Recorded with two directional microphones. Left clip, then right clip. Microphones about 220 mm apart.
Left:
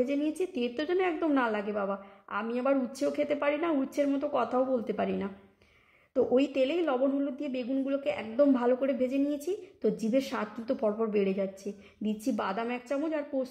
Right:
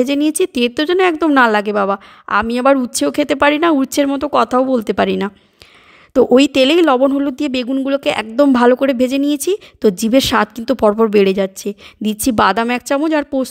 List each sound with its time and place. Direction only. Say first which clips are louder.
0.0 s speech: right 15 dB; 50° right (ahead or behind)